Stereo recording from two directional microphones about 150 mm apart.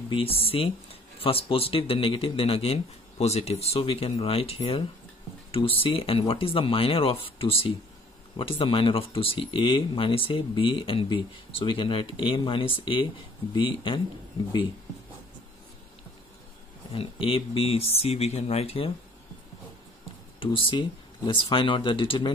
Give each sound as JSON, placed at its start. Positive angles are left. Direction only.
{"t": 0.1, "sound": "speech", "side_deg": 40}
{"t": 16.9, "sound": "speech", "side_deg": 40}
{"t": 20.3, "sound": "speech", "side_deg": 35}